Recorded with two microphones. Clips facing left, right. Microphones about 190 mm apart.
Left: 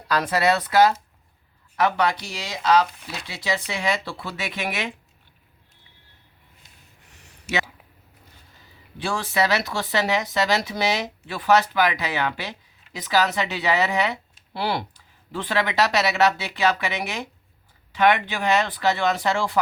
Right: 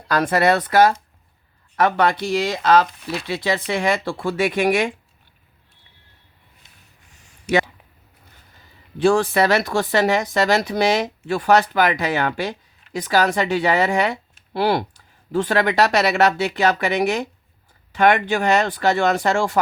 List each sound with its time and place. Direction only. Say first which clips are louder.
0.1 s speech: right 4 dB; 50° right (ahead or behind)
9.0 s speech: right 8 dB; 50° right (ahead or behind)